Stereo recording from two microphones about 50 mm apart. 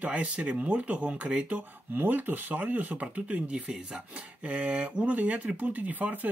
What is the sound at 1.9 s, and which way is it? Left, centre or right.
Speech, right.